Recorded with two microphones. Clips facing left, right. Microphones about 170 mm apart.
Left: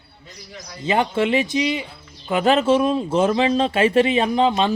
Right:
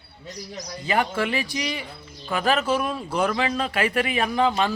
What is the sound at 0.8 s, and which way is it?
Speech, 25° left (ahead or behind).